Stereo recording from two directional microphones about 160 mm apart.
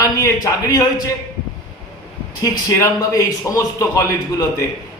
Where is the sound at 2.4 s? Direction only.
20° left (ahead or behind).